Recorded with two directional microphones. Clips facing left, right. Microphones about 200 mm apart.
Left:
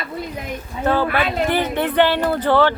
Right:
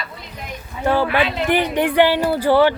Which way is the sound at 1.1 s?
45° left (ahead or behind).